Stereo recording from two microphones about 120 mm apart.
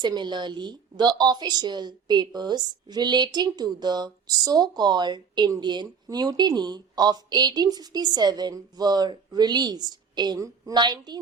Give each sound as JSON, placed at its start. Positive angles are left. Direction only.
{"t": 0.0, "sound": "a woman's voice", "side_deg": -35}